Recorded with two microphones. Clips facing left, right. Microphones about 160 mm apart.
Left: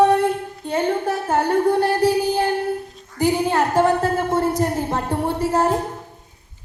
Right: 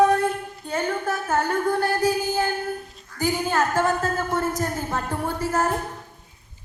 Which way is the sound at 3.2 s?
30° left (ahead or behind).